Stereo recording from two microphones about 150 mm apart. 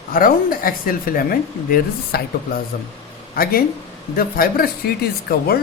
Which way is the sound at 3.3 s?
75° left (ahead or behind).